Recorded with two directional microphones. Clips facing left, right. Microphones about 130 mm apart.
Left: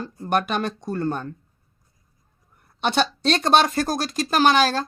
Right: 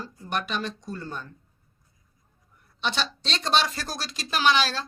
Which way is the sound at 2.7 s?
55° left (ahead or behind).